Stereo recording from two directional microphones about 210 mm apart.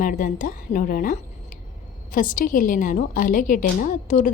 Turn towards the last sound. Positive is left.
turn(degrees=35)  # may be behind; listen again after turning